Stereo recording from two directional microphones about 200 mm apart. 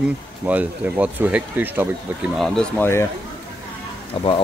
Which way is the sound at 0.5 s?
5° right (ahead or behind).